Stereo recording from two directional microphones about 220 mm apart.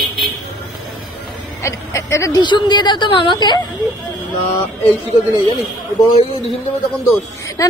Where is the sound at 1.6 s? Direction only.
15° left (ahead or behind).